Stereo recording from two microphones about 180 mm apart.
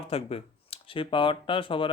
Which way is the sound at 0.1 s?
35° left (ahead or behind).